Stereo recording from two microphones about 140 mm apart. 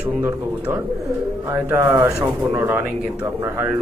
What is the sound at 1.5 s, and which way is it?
Speech, 15° right (ahead or behind).